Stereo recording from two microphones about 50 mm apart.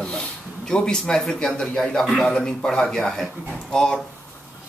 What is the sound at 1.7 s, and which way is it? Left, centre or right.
Speech, centre.